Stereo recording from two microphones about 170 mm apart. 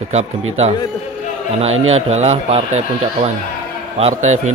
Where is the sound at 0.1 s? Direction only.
40° right (ahead or behind).